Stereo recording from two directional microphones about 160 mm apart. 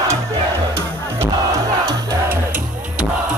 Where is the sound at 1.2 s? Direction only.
20° right (ahead or behind).